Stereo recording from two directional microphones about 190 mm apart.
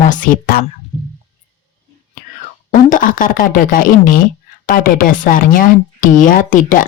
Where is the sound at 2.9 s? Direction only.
45° left (ahead or behind).